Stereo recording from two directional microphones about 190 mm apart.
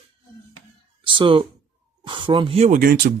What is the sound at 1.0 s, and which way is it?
Speech, 25° right (ahead or behind).